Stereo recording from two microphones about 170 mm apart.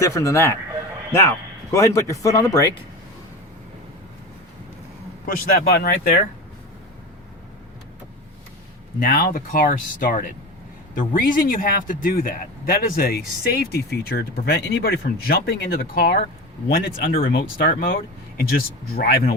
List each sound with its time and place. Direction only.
0.0 s speech: 20° left (ahead or behind)
1.7 s speech: 15° left (ahead or behind)
5.2 s speech: 60° left (ahead or behind)
9.0 s speech: 60° left (ahead or behind)